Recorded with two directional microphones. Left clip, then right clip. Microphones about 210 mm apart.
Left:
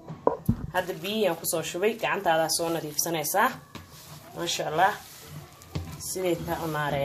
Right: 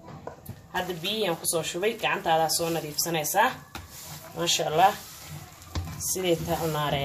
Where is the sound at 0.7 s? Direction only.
20° left (ahead or behind).